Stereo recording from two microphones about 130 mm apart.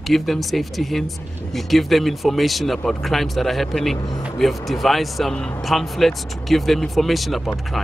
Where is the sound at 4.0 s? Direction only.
30° left (ahead or behind).